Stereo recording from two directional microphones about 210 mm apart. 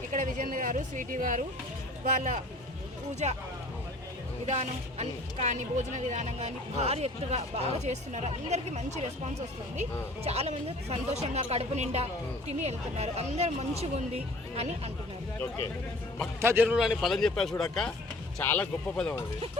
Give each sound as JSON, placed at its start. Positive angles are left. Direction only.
{"t": 0.1, "sound": "speech", "side_deg": -35}
{"t": 4.4, "sound": "speech", "side_deg": -35}
{"t": 15.4, "sound": "speech", "side_deg": 10}
{"t": 16.4, "sound": "a man's voice", "side_deg": -10}